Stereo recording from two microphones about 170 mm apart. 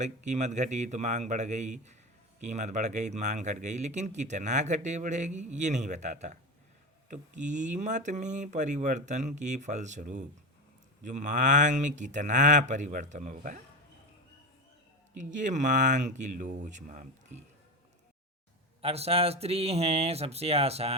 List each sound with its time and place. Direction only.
0.0 s speech: 45° right (ahead or behind)
15.2 s speech: 45° right (ahead or behind)
18.8 s speech: 35° right (ahead or behind)